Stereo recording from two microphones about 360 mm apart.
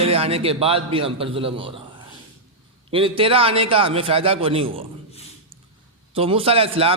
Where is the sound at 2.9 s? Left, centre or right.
Centre.